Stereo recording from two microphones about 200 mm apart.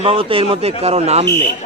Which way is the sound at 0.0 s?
30° right (ahead or behind).